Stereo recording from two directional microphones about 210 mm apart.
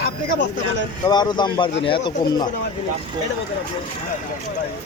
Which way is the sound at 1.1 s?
20° left (ahead or behind).